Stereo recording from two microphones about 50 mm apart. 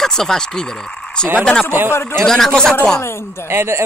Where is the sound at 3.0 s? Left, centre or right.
Left.